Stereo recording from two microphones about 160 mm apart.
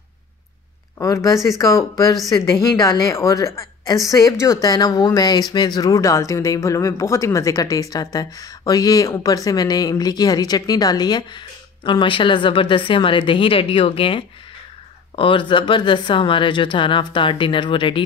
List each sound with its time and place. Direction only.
0.9 s speech: 20° left (ahead or behind)
2.7 s speech: 20° left (ahead or behind)